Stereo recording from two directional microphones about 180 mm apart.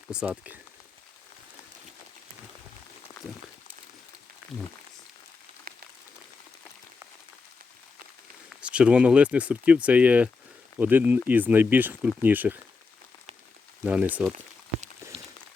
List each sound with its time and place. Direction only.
0.1 s speech: 5° right (ahead or behind)
8.4 s speech: 5° right (ahead or behind)
13.8 s speech: 10° right (ahead or behind)
15.0 s a sound: 15° right (ahead or behind)